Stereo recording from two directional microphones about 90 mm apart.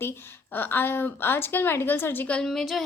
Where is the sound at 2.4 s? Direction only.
Centre (ahead or behind).